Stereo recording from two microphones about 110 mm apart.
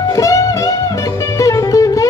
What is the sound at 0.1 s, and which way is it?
Music, 30° left (ahead or behind).